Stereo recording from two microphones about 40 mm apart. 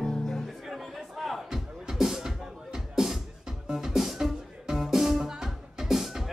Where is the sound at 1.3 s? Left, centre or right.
Centre.